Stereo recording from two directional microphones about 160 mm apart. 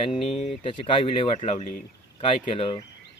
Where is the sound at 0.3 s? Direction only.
40° left (ahead or behind).